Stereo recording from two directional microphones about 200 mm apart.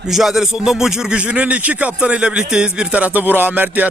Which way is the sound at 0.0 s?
Centre (ahead or behind).